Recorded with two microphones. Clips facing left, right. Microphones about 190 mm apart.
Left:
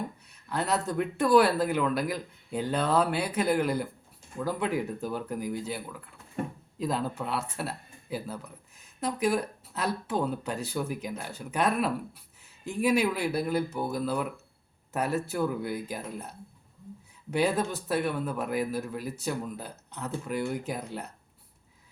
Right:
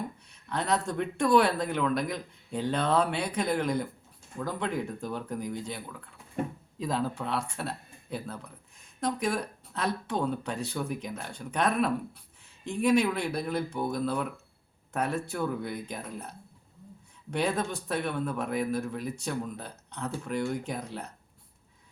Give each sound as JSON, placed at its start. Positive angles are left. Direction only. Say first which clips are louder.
{"t": 0.4, "sound": "speech", "louder": "even", "side_deg": 5}
{"t": 17.3, "sound": "speech", "louder": "left 2 dB", "side_deg": 5}